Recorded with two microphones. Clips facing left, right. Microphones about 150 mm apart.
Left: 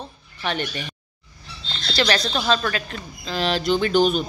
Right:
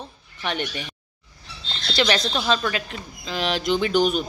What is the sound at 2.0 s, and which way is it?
Speech, 20° right (ahead or behind).